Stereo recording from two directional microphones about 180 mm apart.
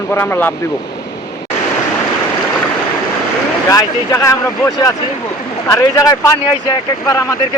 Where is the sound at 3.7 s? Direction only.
20° left (ahead or behind).